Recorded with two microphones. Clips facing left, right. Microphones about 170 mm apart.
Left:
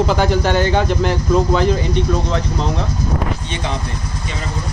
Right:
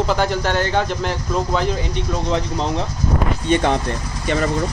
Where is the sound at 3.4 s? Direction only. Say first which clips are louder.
Right 7 dB; 55° right (ahead or behind).